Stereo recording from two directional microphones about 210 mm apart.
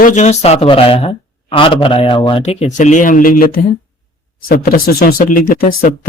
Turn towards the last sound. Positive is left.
turn(degrees=40)  # may be behind; listen again after turning